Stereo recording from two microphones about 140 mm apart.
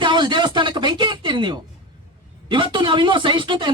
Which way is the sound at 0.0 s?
35° right (ahead or behind).